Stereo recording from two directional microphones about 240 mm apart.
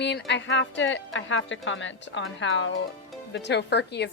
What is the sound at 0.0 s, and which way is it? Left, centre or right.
A woman's voice, left.